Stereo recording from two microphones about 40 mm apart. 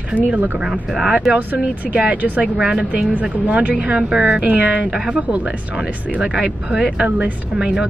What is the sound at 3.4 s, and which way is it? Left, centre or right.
Speech, right.